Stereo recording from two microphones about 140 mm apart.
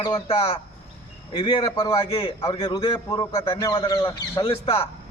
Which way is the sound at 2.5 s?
30° left (ahead or behind).